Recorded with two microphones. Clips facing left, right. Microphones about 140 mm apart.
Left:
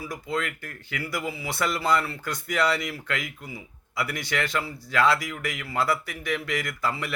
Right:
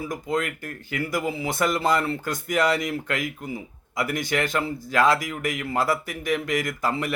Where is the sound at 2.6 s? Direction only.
45° right (ahead or behind).